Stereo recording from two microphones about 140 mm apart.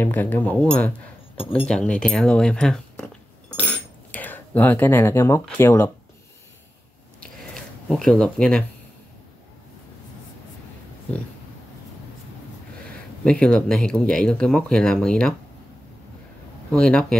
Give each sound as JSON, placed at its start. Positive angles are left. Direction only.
{"t": 0.0, "sound": "speech", "side_deg": 15}
{"t": 3.6, "sound": "cutlery", "side_deg": 10}
{"t": 5.6, "sound": "speech", "side_deg": 15}
{"t": 7.2, "sound": "a sound", "side_deg": 5}
{"t": 13.2, "sound": "speech", "side_deg": 5}
{"t": 16.7, "sound": "speech", "side_deg": 5}